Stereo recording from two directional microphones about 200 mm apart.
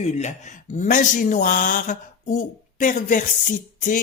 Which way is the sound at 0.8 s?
40° left (ahead or behind).